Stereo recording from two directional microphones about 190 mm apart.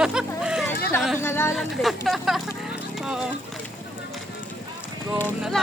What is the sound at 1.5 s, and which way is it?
Speech, centre (ahead or behind).